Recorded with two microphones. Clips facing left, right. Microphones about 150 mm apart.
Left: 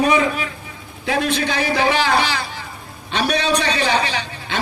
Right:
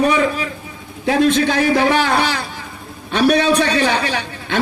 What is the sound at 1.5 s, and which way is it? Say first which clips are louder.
A man's voice: right 4 dB; 55° right (ahead or behind).